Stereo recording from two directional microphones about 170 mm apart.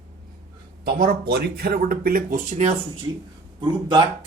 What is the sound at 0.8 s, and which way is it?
Speech, 60° right (ahead or behind).